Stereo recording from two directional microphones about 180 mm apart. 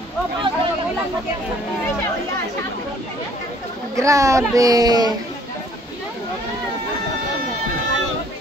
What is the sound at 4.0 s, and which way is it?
Speech, 15° right (ahead or behind).